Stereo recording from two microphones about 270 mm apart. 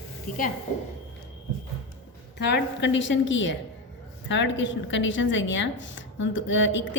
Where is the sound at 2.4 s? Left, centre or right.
Left.